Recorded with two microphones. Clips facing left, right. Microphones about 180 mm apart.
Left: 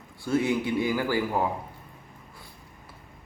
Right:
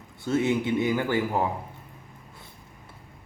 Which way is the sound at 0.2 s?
25° right (ahead or behind).